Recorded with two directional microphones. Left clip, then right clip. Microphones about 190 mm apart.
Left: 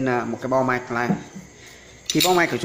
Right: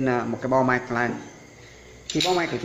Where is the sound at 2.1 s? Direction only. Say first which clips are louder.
Left 5 dB; 25° left (ahead or behind).